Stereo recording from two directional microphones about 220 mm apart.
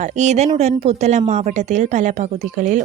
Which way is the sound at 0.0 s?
35° right (ahead or behind).